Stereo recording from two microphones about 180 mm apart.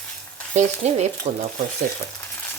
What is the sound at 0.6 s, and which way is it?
Stir, 40° right (ahead or behind).